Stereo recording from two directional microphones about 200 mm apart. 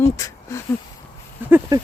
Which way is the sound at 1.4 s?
10° right (ahead or behind).